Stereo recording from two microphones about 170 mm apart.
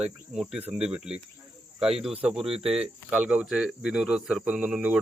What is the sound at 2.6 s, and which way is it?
Speech, 35° right (ahead or behind).